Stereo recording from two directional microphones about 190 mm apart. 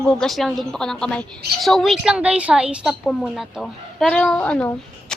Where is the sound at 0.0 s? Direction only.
5° left (ahead or behind).